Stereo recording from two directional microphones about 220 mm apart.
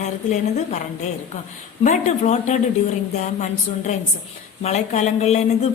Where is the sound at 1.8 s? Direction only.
30° left (ahead or behind).